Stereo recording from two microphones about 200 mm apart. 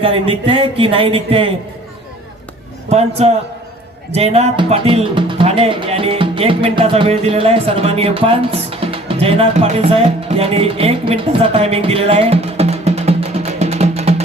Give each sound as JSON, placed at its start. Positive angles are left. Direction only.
{"t": 0.0, "sound": "speech", "side_deg": -25}
{"t": 2.9, "sound": "a man's voice", "side_deg": -30}